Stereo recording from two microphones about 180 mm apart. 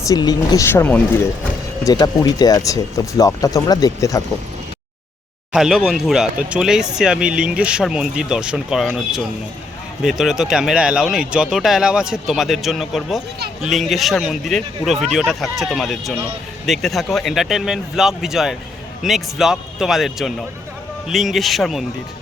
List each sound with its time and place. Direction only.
0.0 s speech: 20° left (ahead or behind)
5.5 s speech: 5° right (ahead or behind)